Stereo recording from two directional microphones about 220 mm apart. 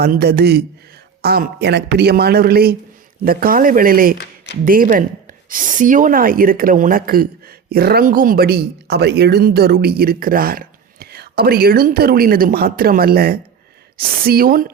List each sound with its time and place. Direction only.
0.0 s speech: 45° right (ahead or behind)